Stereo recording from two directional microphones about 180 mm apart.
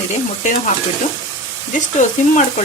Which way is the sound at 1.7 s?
45° left (ahead or behind).